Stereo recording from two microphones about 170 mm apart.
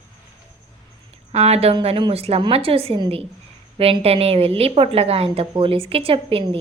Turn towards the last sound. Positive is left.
turn(degrees=-35)  # may be behind; listen again after turning